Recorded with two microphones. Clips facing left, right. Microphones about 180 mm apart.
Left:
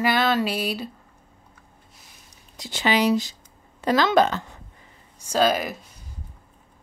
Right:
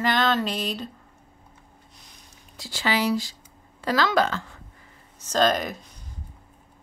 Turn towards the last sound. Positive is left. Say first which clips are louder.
# left 1 dB
turn(degrees=5)  # may be behind; listen again after turning